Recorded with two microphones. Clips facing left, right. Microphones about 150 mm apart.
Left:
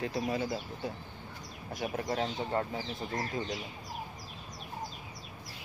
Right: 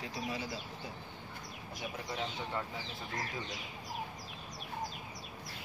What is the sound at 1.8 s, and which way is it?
Speech, 45° left (ahead or behind).